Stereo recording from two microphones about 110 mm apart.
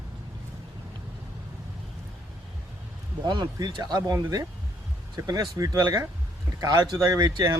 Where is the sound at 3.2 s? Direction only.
40° right (ahead or behind).